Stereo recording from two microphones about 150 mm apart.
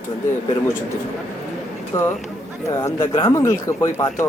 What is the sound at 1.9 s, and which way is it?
Speech, 20° left (ahead or behind).